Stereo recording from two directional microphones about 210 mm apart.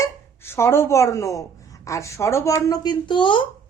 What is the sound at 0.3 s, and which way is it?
A woman's voice, 10° left (ahead or behind).